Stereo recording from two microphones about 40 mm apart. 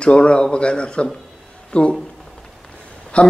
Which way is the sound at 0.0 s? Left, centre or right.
Left.